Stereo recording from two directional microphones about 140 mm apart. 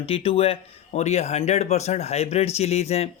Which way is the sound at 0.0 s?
40° left (ahead or behind).